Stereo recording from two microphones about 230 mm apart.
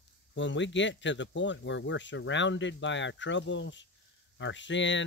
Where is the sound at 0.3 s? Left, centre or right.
Left.